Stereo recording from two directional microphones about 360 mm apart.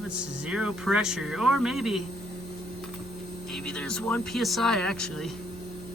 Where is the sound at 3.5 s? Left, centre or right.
Centre.